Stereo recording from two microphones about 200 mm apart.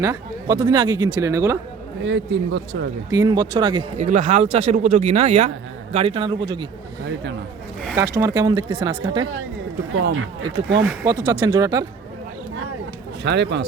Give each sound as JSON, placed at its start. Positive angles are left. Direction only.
{"t": 0.0, "sound": "speech", "side_deg": -15}
{"t": 2.0, "sound": "speech", "side_deg": -65}
{"t": 3.1, "sound": "speech", "side_deg": -20}
{"t": 3.9, "sound": "speech", "side_deg": -35}
{"t": 7.9, "sound": "speech", "side_deg": -15}
{"t": 10.2, "sound": "speech", "side_deg": -80}
{"t": 11.0, "sound": "speech", "side_deg": -15}
{"t": 13.2, "sound": "speech", "side_deg": -60}